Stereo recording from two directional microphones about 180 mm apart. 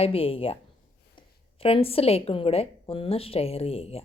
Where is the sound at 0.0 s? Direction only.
30° left (ahead or behind).